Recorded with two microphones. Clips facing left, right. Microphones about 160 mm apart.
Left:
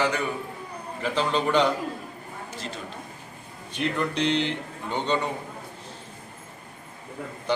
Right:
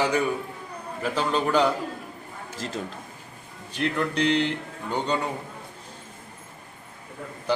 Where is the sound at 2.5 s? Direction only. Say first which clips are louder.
Right 5 dB; 90° right.